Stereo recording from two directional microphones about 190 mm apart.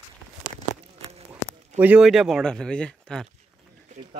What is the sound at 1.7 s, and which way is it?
Speech, 5° right (ahead or behind).